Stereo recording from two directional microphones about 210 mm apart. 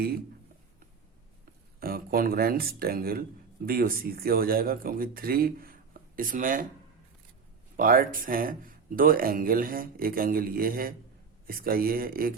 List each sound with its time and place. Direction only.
1.8 s speech: 45° right (ahead or behind)
7.8 s speech: 40° right (ahead or behind)